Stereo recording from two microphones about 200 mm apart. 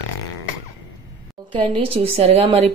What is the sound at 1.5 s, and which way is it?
Speech, 25° right (ahead or behind).